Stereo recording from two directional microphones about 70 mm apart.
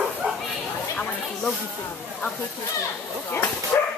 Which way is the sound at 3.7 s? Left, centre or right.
Left.